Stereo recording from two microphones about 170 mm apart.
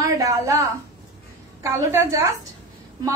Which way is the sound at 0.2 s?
20° right (ahead or behind).